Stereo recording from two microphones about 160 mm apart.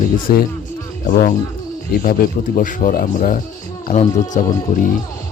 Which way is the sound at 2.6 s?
55° left (ahead or behind).